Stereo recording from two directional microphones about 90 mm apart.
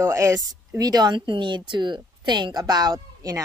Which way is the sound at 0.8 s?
50° right (ahead or behind).